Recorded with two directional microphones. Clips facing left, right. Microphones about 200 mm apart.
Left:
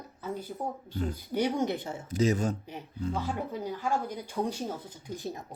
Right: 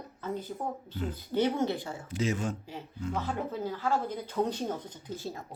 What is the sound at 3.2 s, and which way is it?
Speech, 15° left (ahead or behind).